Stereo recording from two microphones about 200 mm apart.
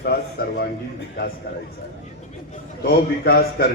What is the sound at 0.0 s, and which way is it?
Speech, 50° left (ahead or behind).